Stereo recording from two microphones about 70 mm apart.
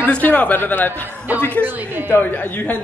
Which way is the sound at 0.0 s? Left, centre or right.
Left.